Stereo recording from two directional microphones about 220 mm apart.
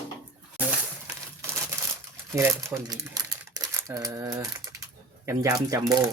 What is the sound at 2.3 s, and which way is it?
Speech, 10° right (ahead or behind).